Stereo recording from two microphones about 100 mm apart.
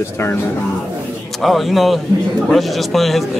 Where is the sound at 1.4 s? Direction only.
Centre (ahead or behind).